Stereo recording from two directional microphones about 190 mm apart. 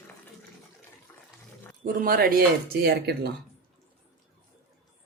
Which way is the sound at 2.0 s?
50° right (ahead or behind).